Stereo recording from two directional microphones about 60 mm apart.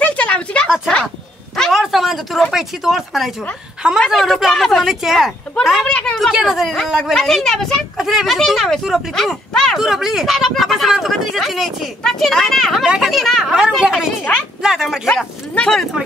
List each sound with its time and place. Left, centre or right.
0.0 s a sound: left
1.7 s a sound: centre
2.5 s speech: centre
5.9 s a woman's voice: centre
6.3 s speech: centre
8.4 s speech: centre
12.8 s speech: centre
13.1 s speech: centre
15.6 s speech: centre